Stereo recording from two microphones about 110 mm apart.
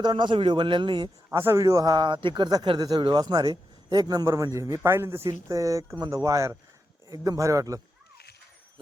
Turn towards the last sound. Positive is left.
turn(degrees=-30)  # may be behind; listen again after turning